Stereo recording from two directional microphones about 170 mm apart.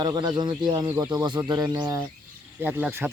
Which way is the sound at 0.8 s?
15° right (ahead or behind).